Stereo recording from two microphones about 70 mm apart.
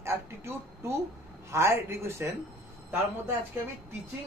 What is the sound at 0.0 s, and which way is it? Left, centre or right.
Speech, right.